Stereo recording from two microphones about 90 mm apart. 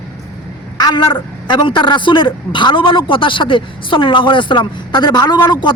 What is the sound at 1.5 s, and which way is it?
A woman's voice, 60° left (ahead or behind).